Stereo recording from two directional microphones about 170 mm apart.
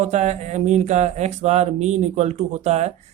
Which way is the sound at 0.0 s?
45° right (ahead or behind).